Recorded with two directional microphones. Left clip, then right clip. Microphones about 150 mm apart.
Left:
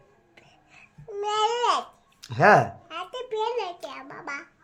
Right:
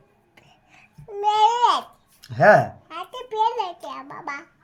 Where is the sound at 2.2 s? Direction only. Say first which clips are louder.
Right 3 dB; 25° left (ahead or behind).